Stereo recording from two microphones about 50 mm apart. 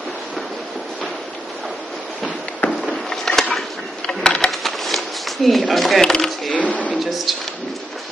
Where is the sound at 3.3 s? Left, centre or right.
Centre.